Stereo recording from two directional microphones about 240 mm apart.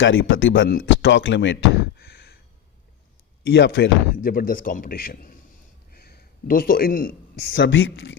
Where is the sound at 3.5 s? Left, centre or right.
Left.